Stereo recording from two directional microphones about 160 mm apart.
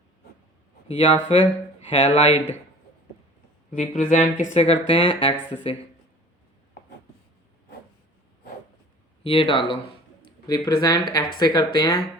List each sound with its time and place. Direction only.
0.9 s speech: 45° left (ahead or behind)
3.7 s speech: 50° left (ahead or behind)
9.2 s speech: 35° left (ahead or behind)